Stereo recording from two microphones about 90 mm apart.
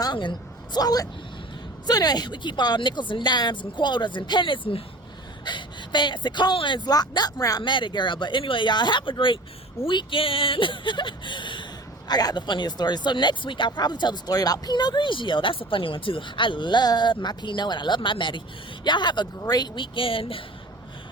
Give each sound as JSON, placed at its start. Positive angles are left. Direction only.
{"t": 0.0, "sound": "speech", "side_deg": 60}
{"t": 5.5, "sound": "speech", "side_deg": 60}
{"t": 7.6, "sound": "speech", "side_deg": 60}
{"t": 12.0, "sound": "speech", "side_deg": 50}
{"t": 19.4, "sound": "speech", "side_deg": 45}
{"t": 19.7, "sound": "speech", "side_deg": 70}